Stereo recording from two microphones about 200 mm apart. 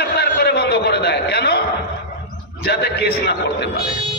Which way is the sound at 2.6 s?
55° left (ahead or behind).